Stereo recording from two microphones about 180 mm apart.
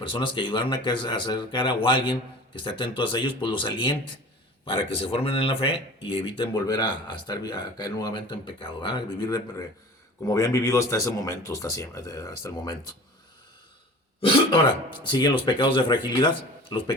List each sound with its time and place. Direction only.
0.0 s speech: 30° left (ahead or behind)
15.0 s speech: 25° left (ahead or behind)